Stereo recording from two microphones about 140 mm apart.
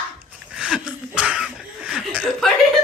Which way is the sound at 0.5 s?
5° right (ahead or behind).